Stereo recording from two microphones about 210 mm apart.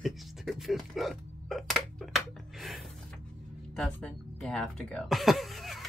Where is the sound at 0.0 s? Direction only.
Centre (ahead or behind).